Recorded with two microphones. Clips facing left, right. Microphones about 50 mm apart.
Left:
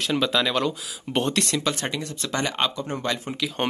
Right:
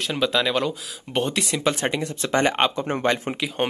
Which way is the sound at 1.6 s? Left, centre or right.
Right.